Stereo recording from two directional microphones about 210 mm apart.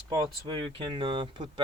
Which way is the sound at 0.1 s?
15° right (ahead or behind).